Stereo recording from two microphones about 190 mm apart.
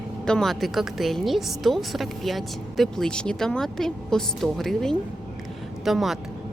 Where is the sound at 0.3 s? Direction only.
Centre (ahead or behind).